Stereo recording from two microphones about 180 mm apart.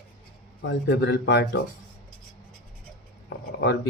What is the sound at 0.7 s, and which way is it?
Speech, 70° left (ahead or behind).